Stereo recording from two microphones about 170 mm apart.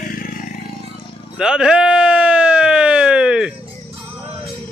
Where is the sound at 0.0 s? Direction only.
55° left (ahead or behind).